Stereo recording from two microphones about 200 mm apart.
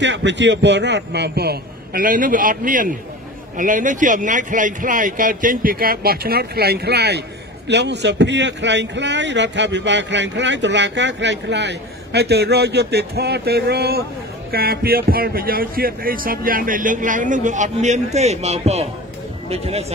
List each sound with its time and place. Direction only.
0.0 s a man's voice: 65° right (ahead or behind); by 19.9 s 30° right (ahead or behind)